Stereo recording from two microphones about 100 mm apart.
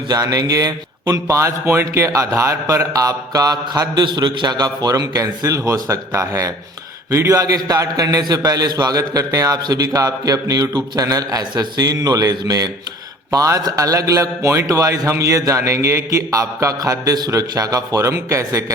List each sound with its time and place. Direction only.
0.1 s a man's voice: 40° right (ahead or behind)